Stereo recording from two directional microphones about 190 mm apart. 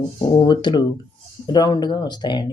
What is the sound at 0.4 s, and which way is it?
Speech, 20° left (ahead or behind).